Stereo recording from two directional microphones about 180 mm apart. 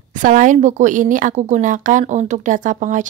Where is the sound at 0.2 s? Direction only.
45° right (ahead or behind).